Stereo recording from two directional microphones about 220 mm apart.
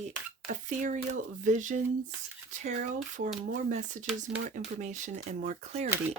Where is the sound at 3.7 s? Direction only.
35° right (ahead or behind).